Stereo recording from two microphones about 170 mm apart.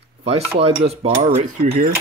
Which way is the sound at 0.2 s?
35° right (ahead or behind).